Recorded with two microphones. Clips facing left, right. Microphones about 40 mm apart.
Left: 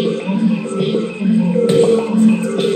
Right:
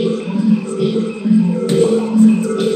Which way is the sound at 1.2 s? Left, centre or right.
Left.